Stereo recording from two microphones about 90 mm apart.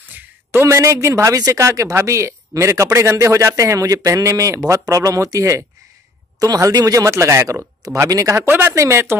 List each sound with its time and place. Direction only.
0.5 s speech: 30° right (ahead or behind)
7.8 s speech: 40° right (ahead or behind)
8.5 s speech: 25° right (ahead or behind)